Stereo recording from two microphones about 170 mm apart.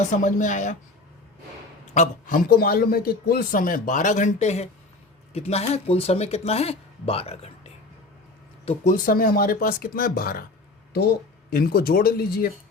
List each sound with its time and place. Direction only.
0.1 s a man's voice: 45° left (ahead or behind)
1.9 s a man's voice: 50° left (ahead or behind)
11.5 s speech: 60° left (ahead or behind)